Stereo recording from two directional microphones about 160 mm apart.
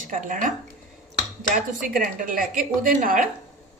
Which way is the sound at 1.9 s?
60° right (ahead or behind).